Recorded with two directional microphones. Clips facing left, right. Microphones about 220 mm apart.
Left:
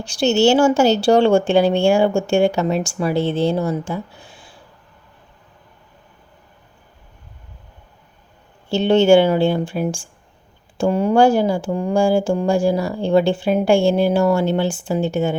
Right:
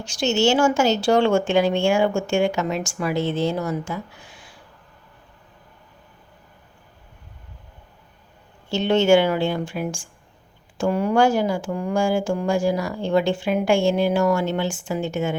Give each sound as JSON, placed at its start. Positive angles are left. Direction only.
{"t": 0.0, "sound": "speech", "side_deg": 35}
{"t": 8.7, "sound": "speech", "side_deg": 30}